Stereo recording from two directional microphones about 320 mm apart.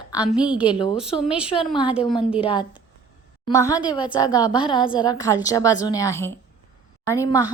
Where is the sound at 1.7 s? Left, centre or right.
Centre.